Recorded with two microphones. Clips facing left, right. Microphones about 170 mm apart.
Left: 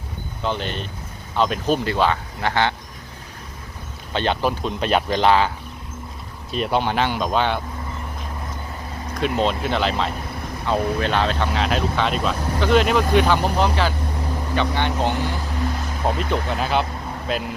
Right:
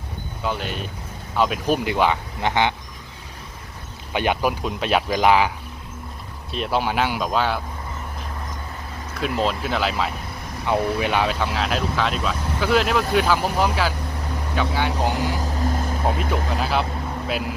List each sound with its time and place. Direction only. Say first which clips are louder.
0.4 s speech: left 1 dB; 5° right (ahead or behind)
4.1 s speech: even; 10° right (ahead or behind)
6.5 s speech: left 2 dB; centre (ahead or behind)
9.2 s speech: left 2 dB; centre (ahead or behind)
15.4 s boat: right 1 dB; 40° right (ahead or behind)
16.0 s speech: left 3 dB; 5° right (ahead or behind)